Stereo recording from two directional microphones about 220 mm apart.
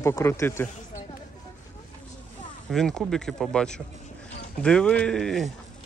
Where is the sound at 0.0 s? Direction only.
10° left (ahead or behind).